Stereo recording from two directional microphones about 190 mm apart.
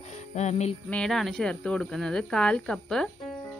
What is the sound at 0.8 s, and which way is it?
A woman's voice, 5° left (ahead or behind).